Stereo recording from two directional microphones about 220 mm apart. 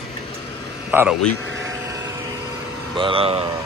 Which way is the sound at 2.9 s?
25° right (ahead or behind).